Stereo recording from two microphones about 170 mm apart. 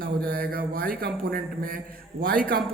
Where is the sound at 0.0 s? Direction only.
60° right (ahead or behind).